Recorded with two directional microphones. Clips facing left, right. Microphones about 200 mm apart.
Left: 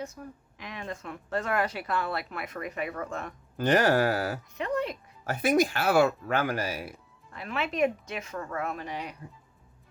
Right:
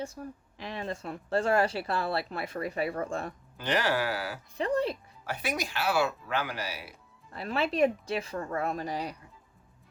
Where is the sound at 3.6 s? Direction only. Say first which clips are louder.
Left 6 dB; 45° left (ahead or behind).